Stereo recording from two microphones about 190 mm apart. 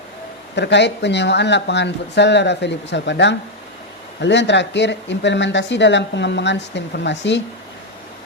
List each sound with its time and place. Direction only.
0.5 s speech: 65° left (ahead or behind)